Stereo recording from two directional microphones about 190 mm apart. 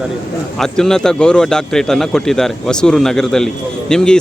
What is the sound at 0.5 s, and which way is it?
A man's voice, 5° left (ahead or behind).